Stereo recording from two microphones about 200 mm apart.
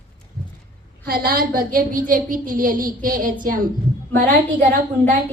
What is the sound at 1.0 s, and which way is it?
A woman's voice, 45° right (ahead or behind).